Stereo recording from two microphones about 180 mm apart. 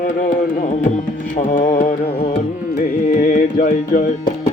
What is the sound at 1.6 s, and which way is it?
Music, 45° left (ahead or behind).